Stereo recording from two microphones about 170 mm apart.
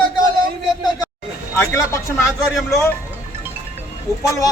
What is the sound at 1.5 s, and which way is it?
Speech, 15° left (ahead or behind).